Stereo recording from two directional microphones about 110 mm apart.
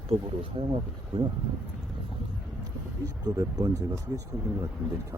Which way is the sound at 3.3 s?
30° right (ahead or behind).